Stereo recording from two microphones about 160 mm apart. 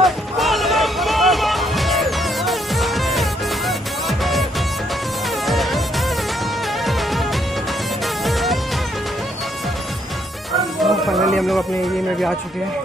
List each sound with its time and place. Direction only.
0.0 s music: centre (ahead or behind)
5.5 s music: centre (ahead or behind)
10.8 s music: centre (ahead or behind)